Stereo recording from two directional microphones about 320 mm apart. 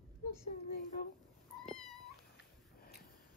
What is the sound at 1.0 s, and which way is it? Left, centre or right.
Speech, left.